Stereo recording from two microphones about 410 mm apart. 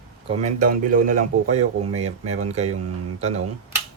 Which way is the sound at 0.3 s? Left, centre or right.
Centre.